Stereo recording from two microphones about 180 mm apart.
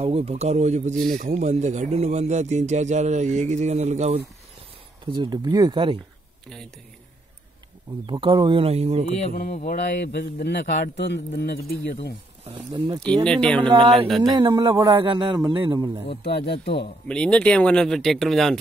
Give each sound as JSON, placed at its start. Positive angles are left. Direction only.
{"t": 0.0, "sound": "speech", "side_deg": -35}
{"t": 5.0, "sound": "speech", "side_deg": -25}
{"t": 8.1, "sound": "speech", "side_deg": -25}
{"t": 9.1, "sound": "speech", "side_deg": 45}
{"t": 12.7, "sound": "speech", "side_deg": -25}
{"t": 13.2, "sound": "speech", "side_deg": 5}
{"t": 14.2, "sound": "speech", "side_deg": -25}
{"t": 14.7, "sound": "a man's voice", "side_deg": -15}
{"t": 15.0, "sound": "speech", "side_deg": -25}
{"t": 16.2, "sound": "speech", "side_deg": 65}
{"t": 17.1, "sound": "speech", "side_deg": 5}